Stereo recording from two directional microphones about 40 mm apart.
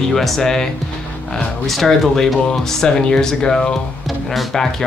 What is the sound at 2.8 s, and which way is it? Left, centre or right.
Speech, centre.